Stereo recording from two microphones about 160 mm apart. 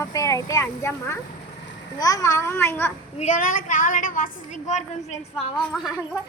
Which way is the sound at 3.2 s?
50° left (ahead or behind).